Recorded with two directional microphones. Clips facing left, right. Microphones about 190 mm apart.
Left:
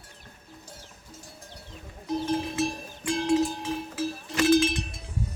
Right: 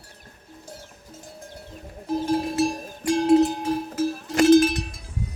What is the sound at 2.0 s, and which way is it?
Music, 35° right (ahead or behind).